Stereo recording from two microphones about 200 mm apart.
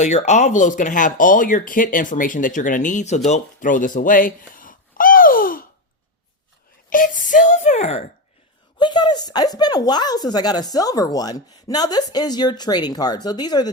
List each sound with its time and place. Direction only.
0.0 s speech: 35° left (ahead or behind)
3.2 s a sound: 40° left (ahead or behind)
6.9 s speech: 40° left (ahead or behind)
8.8 s speech: 20° left (ahead or behind)